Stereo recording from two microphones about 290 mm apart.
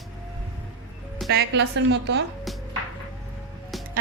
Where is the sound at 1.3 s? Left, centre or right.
Right.